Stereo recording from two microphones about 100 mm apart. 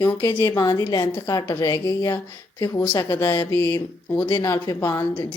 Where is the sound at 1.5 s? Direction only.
35° left (ahead or behind).